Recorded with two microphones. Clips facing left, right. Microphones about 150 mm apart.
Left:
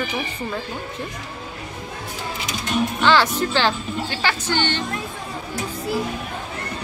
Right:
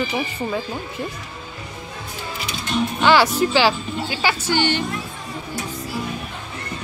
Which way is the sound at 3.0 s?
10° right (ahead or behind).